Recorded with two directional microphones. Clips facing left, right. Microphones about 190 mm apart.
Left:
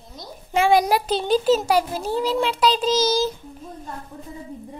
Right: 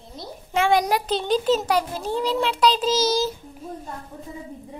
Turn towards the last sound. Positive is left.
turn(degrees=0)  # may be behind; listen again after turning